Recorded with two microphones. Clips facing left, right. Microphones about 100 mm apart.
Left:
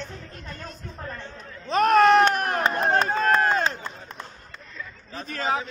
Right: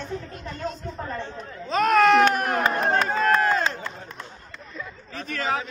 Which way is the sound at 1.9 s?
35° left (ahead or behind).